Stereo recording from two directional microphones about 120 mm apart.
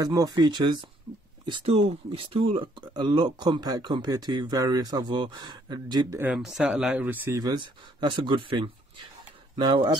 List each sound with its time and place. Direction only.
0.0 s speech: 30° right (ahead or behind)
1.6 s speech: 60° right (ahead or behind); by 6.0 s 35° right (ahead or behind)
6.3 s speech: 5° right (ahead or behind)
7.3 s speech: 35° right (ahead or behind)